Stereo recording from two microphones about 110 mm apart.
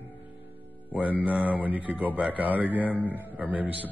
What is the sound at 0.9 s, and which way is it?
Speech, 15° right (ahead or behind).